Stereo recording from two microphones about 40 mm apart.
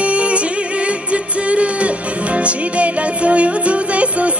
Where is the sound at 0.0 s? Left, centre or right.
Right.